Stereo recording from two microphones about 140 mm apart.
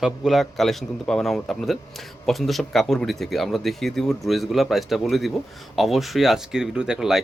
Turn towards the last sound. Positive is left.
turn(degrees=-5)  # may be behind; listen again after turning